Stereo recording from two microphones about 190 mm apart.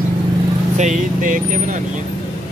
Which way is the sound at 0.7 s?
40° right (ahead or behind).